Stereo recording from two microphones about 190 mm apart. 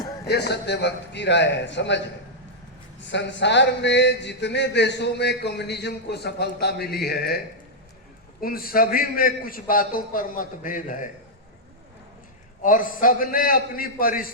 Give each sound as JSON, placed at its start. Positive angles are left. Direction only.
{"t": 0.3, "sound": "speech", "side_deg": 60}
{"t": 3.0, "sound": "a man's voice", "side_deg": 70}
{"t": 12.6, "sound": "a man's voice", "side_deg": 45}